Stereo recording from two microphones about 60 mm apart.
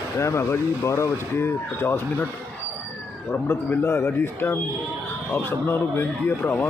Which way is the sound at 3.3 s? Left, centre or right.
Left.